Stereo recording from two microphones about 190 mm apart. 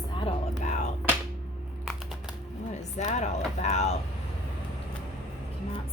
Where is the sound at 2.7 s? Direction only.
35° left (ahead or behind).